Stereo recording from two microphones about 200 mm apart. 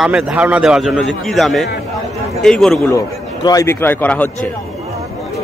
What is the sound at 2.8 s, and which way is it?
Speech, 15° left (ahead or behind).